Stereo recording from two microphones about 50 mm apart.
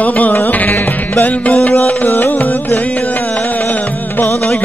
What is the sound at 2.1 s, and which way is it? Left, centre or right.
Music, left.